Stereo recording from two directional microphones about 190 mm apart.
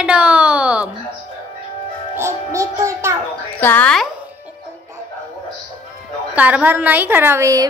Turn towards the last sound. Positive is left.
turn(degrees=-15)  # may be behind; listen again after turning